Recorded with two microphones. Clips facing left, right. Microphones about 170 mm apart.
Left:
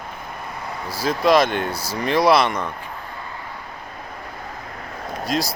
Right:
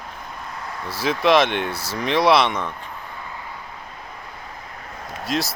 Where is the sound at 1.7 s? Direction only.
25° right (ahead or behind).